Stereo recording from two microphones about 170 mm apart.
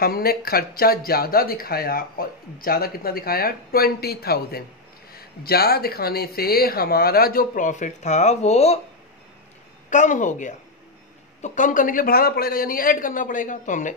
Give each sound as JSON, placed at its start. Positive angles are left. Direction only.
{"t": 0.0, "sound": "speech", "side_deg": 60}
{"t": 9.8, "sound": "speech", "side_deg": 45}